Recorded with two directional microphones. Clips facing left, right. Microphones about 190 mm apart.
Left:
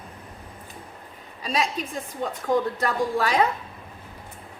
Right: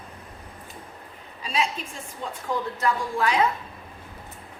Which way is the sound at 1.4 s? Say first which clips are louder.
Left 1 dB; 40° left (ahead or behind).